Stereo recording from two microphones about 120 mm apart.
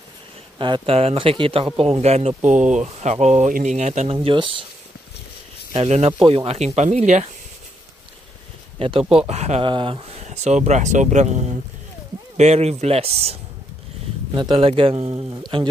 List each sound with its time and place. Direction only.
0.6 s speech: 40° right (ahead or behind)
0.9 s speech: 50° right (ahead or behind)
1.8 s speech: 60° right (ahead or behind)
4.1 s speech: 50° right (ahead or behind)
5.9 s speech: 65° right (ahead or behind)
6.1 s speech: 50° right (ahead or behind); by 7.2 s 80° right
8.7 s speech: 50° right (ahead or behind)
9.3 s speech: 65° right (ahead or behind)
9.6 s speech: 45° right (ahead or behind); by 11.3 s 80° right
12.4 s speech: 60° right (ahead or behind)
14.3 s speech: 40° right (ahead or behind)
14.7 s speech: 55° right (ahead or behind)